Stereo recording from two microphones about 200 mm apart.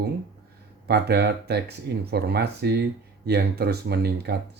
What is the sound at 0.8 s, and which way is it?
Speech, 55° right (ahead or behind).